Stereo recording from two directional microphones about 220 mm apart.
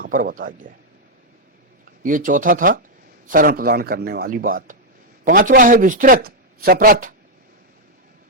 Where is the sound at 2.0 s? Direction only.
35° right (ahead or behind).